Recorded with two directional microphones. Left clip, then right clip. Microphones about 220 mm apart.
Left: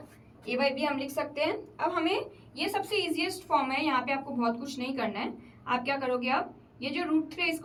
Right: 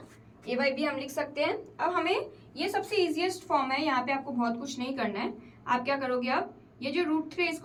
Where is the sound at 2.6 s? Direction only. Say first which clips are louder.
Right 1 dB; 15° right (ahead or behind).